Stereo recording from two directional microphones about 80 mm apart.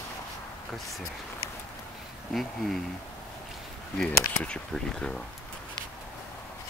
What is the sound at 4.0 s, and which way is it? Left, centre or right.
Speech, centre.